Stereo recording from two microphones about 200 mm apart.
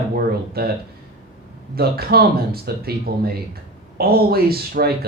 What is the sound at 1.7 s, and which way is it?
Speech, 50° right (ahead or behind).